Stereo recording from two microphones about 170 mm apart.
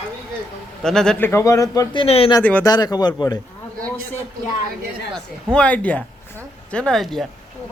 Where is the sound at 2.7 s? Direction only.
25° left (ahead or behind).